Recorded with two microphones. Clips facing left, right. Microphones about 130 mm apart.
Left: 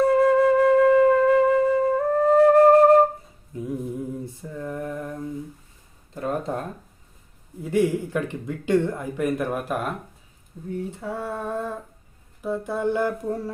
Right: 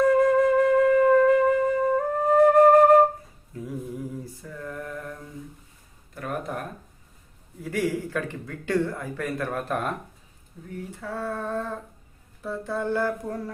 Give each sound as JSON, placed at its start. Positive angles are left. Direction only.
{"t": 0.0, "sound": "flute", "side_deg": 30}
{"t": 1.2, "sound": "wind instrument", "side_deg": 30}
{"t": 2.4, "sound": "flute", "side_deg": 30}
{"t": 3.5, "sound": "humming", "side_deg": 20}
{"t": 4.4, "sound": "mantra", "side_deg": 20}
{"t": 6.1, "sound": "a sound", "side_deg": 25}
{"t": 7.6, "sound": "speech", "side_deg": 25}